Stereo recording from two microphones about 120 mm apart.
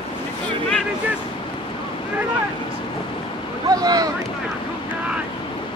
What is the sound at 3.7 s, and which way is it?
Boat, 30° right (ahead or behind).